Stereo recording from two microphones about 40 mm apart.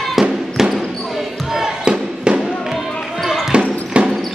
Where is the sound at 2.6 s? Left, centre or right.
Centre.